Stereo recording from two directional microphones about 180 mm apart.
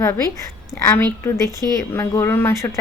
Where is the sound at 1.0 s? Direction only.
20° right (ahead or behind).